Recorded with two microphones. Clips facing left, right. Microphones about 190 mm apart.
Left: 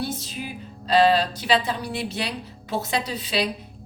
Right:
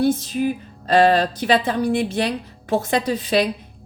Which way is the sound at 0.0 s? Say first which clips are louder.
Right 11 dB; 50° right (ahead or behind).